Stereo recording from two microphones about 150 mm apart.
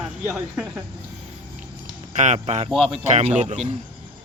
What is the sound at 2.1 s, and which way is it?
Speech, 50° right (ahead or behind).